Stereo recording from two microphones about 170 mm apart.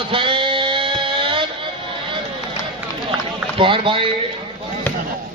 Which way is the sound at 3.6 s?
30° right (ahead or behind).